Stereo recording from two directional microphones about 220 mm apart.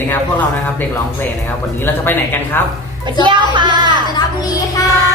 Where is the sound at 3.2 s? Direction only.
20° right (ahead or behind).